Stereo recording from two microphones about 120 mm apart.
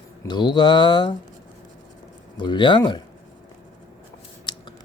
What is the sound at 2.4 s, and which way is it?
Speech, 40° left (ahead or behind).